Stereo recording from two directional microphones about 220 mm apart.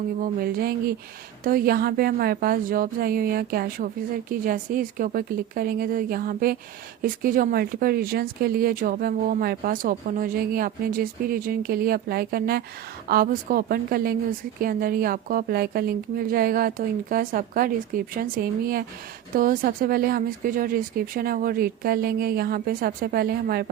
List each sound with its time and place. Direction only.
0.2 s speech: 40° right (ahead or behind)